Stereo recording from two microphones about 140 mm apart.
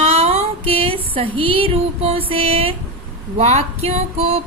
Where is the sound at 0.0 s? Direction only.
45° right (ahead or behind).